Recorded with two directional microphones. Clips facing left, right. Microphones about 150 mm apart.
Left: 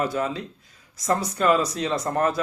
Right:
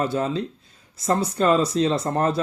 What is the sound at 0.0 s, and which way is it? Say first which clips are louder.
Speech: right 2 dB; 30° right (ahead or behind).